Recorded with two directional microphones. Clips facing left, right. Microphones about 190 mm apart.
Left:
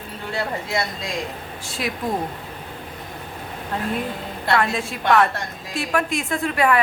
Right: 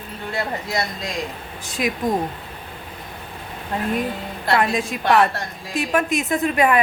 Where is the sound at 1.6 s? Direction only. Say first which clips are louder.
Right 4 dB; 15° right (ahead or behind).